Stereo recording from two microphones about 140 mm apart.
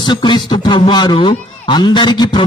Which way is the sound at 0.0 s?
30° left (ahead or behind).